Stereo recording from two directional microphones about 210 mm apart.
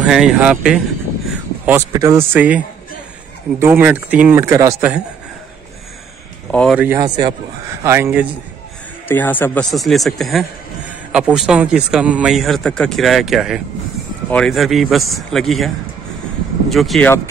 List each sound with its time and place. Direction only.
0.0 s a man's voice: centre (ahead or behind)
6.5 s a man's voice: 5° left (ahead or behind)
6.8 s speech: 15° right (ahead or behind)
9.0 s a man's voice: 10° left (ahead or behind)